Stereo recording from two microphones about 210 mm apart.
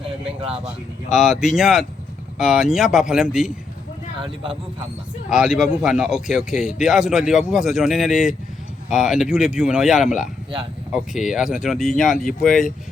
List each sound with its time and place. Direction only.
0.0 s a sound: 30° right (ahead or behind)
1.1 s a man's voice: centre (ahead or behind)
5.3 s a man's voice: 5° right (ahead or behind)